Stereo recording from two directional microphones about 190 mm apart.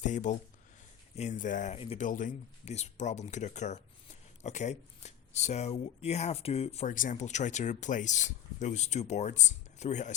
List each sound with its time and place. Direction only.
0.0 s speech: 40° left (ahead or behind)
2.0 s speech: 45° left (ahead or behind)